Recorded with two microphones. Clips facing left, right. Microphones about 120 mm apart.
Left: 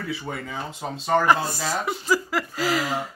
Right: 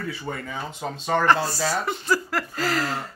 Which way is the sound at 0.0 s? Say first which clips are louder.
Even; 5° left (ahead or behind).